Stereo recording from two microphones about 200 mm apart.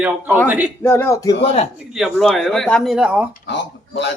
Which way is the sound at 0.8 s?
10° left (ahead or behind).